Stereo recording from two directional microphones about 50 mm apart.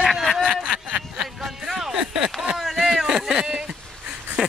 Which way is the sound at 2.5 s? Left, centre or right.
Centre.